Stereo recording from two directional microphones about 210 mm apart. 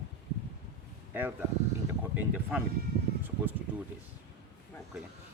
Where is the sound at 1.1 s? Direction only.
10° right (ahead or behind).